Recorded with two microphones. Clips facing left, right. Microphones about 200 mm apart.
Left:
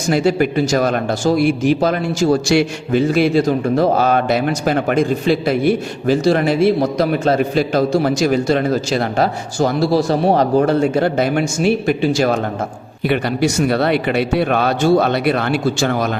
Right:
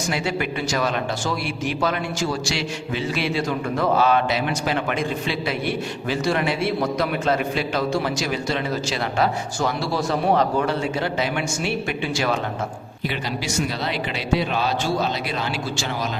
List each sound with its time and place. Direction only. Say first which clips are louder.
0.1 s a man's voice: left 12 dB; 40° left (ahead or behind)
13.1 s a man's voice: left 11 dB; 60° left (ahead or behind)